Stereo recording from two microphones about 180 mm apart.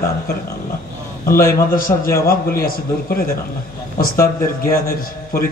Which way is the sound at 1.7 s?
50° left (ahead or behind).